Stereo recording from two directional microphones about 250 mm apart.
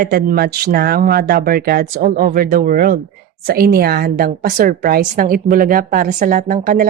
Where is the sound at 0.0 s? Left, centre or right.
Right.